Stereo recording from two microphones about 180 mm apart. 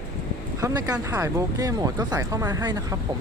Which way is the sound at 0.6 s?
20° right (ahead or behind).